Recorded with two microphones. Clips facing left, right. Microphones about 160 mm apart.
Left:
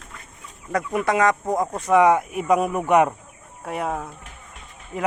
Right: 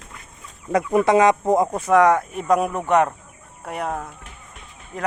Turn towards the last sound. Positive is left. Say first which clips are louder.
# left 1 dB
turn(degrees=5)  # may be behind; listen again after turning